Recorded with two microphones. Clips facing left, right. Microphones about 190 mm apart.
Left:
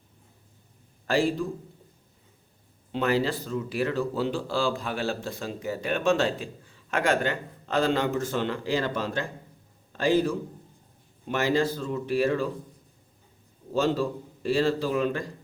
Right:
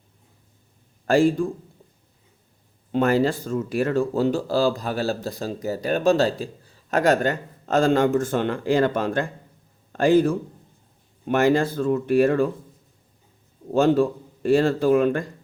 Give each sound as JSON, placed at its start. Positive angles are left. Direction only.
{"t": 1.0, "sound": "speech", "side_deg": -45}
{"t": 2.9, "sound": "a man's voice", "side_deg": -45}
{"t": 13.7, "sound": "speech", "side_deg": -55}